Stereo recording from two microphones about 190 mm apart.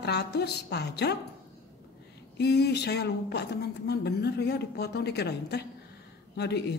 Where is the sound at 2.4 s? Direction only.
60° left (ahead or behind).